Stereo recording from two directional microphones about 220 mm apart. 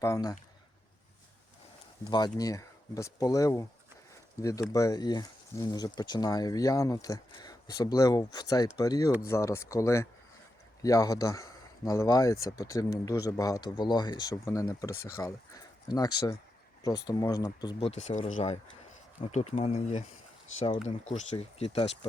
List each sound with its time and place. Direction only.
0.0 s speech: 15° left (ahead or behind)
2.0 s speech: 20° left (ahead or behind)